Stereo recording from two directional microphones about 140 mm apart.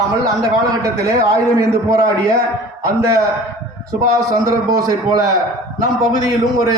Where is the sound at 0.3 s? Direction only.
25° right (ahead or behind).